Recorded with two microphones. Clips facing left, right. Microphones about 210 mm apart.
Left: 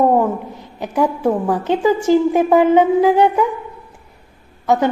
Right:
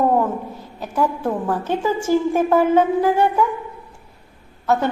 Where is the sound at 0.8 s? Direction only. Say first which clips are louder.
Left 4 dB; 15° left (ahead or behind).